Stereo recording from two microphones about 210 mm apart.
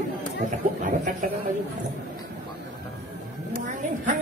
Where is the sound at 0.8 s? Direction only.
40° right (ahead or behind).